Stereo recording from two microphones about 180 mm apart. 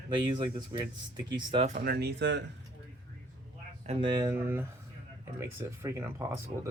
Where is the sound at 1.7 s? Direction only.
55° right (ahead or behind); by 2.4 s 75° right (ahead or behind).